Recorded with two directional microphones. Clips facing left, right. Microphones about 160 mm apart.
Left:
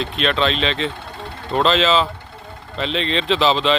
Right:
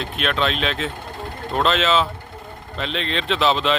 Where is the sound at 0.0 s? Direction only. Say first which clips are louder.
Left 3 dB; centre (ahead or behind).